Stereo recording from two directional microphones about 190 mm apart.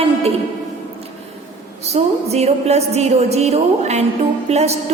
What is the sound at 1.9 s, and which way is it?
A woman's voice, 35° right (ahead or behind).